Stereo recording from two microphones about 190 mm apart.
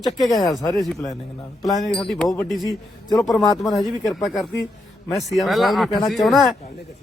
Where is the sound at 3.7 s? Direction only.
20° left (ahead or behind).